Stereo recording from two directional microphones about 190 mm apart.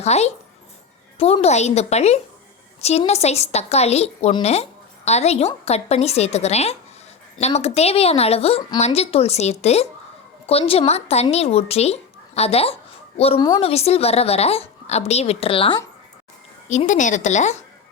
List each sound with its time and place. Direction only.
0.0 s a woman's voice: 35° left (ahead or behind)
16.6 s a woman's voice: 40° left (ahead or behind)